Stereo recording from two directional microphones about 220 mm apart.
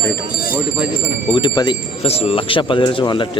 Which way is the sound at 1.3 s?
20° left (ahead or behind).